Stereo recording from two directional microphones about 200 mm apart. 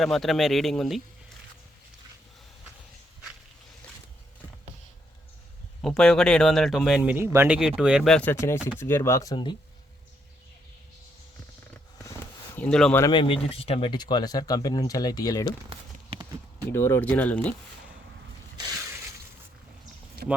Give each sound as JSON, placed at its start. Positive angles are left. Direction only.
{"t": 0.0, "sound": "a man's voice", "side_deg": 0}
{"t": 5.8, "sound": "a man's voice", "side_deg": 0}
{"t": 12.5, "sound": "speech", "side_deg": 5}
{"t": 13.1, "sound": "speech", "side_deg": 25}
{"t": 15.7, "sound": "clip-clop", "side_deg": -25}
{"t": 16.7, "sound": "speech", "side_deg": 10}